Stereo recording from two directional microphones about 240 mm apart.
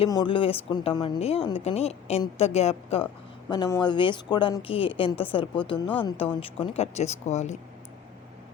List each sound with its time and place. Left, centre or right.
0.0 s speech: centre